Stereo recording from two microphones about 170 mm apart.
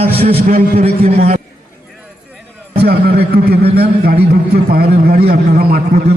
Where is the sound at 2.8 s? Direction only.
70° right (ahead or behind).